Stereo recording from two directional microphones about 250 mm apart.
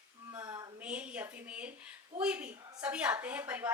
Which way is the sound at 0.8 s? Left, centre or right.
Centre.